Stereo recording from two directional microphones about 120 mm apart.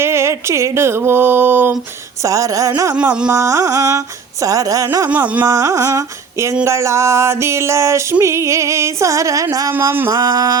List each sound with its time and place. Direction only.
0.0 s speech: 20° right (ahead or behind)
2.2 s music: 25° right (ahead or behind)
2.9 s music: 10° right (ahead or behind)
3.3 s music: 25° right (ahead or behind)